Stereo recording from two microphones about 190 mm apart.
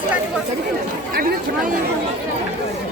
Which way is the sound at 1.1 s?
50° right (ahead or behind).